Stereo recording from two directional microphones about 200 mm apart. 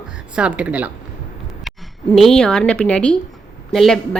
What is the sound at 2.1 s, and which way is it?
A woman's voice, 5° left (ahead or behind).